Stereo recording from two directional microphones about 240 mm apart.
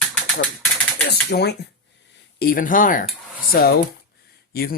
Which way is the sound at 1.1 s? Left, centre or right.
Left.